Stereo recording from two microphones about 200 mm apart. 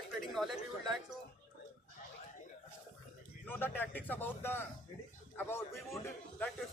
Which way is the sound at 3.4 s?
10° left (ahead or behind).